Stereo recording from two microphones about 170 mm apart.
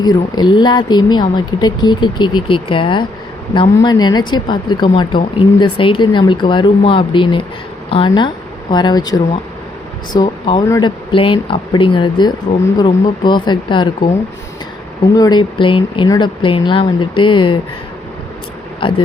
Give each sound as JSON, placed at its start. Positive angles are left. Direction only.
{"t": 0.0, "sound": "a woman's voice", "side_deg": 25}
{"t": 15.1, "sound": "a woman's voice", "side_deg": 25}
{"t": 18.8, "sound": "speech", "side_deg": 30}